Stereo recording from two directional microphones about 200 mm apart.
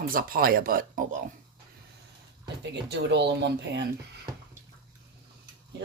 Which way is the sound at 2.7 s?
60° right (ahead or behind).